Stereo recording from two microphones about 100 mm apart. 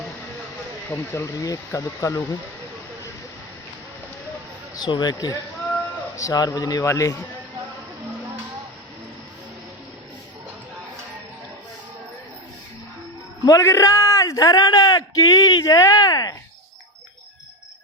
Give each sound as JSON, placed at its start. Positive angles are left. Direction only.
{"t": 0.9, "sound": "speech", "side_deg": 25}
{"t": 4.7, "sound": "speech", "side_deg": 45}
{"t": 13.4, "sound": "a man's voice", "side_deg": 35}